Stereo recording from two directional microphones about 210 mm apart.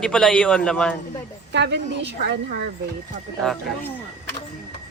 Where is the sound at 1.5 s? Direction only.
55° right (ahead or behind).